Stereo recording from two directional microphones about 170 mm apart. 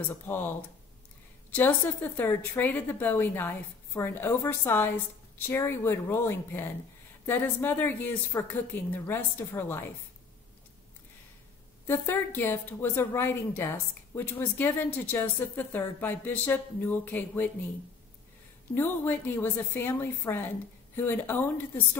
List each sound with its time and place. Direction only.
0.1 s a woman's voice: 10° left (ahead or behind)
2.1 s a woman's voice: 10° left (ahead or behind)
11.8 s a woman's voice: 15° left (ahead or behind)
18.8 s a woman's voice: 10° left (ahead or behind)